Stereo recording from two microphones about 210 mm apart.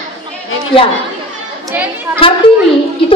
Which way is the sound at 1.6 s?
10° right (ahead or behind).